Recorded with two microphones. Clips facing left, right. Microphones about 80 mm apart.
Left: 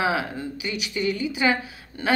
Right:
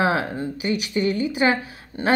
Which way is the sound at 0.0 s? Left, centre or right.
Right.